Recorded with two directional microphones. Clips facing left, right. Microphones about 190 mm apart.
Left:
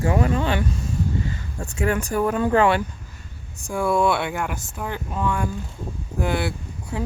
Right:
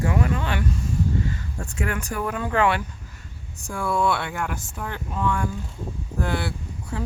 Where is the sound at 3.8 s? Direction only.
15° left (ahead or behind).